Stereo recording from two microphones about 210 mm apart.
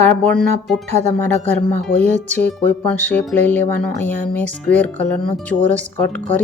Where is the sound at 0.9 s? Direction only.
30° right (ahead or behind).